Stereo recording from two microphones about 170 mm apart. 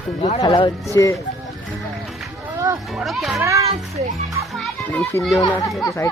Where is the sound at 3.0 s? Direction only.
Centre (ahead or behind).